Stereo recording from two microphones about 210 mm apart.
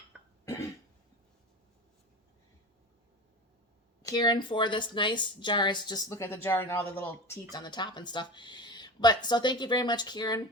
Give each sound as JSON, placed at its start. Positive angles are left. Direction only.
{"t": 0.4, "sound": "cough", "side_deg": 15}
{"t": 4.0, "sound": "speech", "side_deg": 20}
{"t": 7.5, "sound": "speech", "side_deg": 20}